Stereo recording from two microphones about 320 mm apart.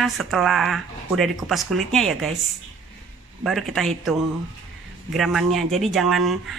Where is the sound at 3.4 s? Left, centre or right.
Centre.